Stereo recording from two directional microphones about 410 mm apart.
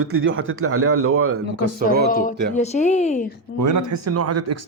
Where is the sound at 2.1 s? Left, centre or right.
Centre.